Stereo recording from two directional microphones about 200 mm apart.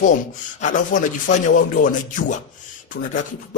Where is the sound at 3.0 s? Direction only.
55° left (ahead or behind).